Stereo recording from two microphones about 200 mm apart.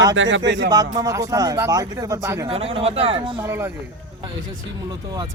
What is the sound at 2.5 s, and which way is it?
Speech, 30° right (ahead or behind).